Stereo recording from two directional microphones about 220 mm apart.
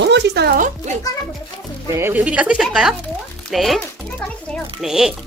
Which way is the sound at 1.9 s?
10° right (ahead or behind).